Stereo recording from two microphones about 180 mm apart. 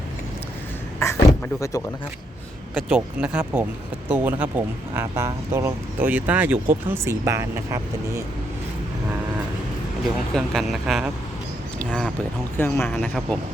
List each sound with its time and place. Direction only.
0.9 s speech: 15° left (ahead or behind)
2.7 s speech: 5° right (ahead or behind)
10.3 s speech: centre (ahead or behind)
12.9 s speech: centre (ahead or behind)